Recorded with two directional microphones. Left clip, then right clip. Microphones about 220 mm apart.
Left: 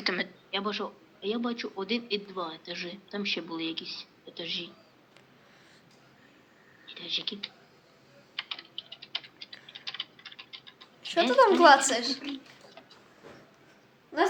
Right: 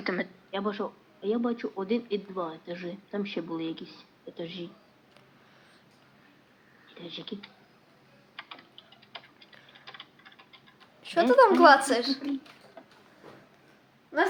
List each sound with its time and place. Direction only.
0.0 s speech: 15° right (ahead or behind)
6.9 s speech: 15° right (ahead or behind)
8.4 s typing: 20° right (ahead or behind)